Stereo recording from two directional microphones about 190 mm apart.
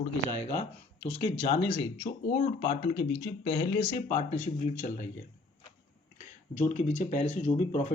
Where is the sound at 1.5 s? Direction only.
40° left (ahead or behind).